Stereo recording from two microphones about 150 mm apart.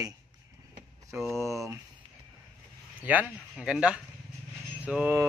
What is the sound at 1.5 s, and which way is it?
Speech, 20° right (ahead or behind).